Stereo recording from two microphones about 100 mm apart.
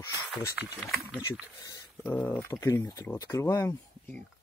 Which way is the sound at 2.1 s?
25° left (ahead or behind).